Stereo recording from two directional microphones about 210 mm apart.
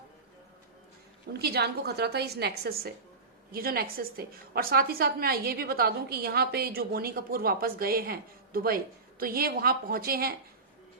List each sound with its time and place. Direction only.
1.3 s a woman's voice: 50° right (ahead or behind)